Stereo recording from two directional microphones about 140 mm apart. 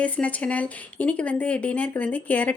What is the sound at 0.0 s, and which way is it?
Speech, 10° left (ahead or behind).